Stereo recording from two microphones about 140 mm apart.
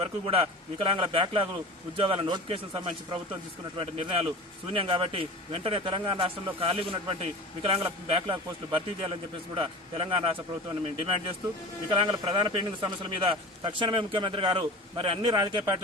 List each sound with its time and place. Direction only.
0.0 s a man's voice: 45° right (ahead or behind)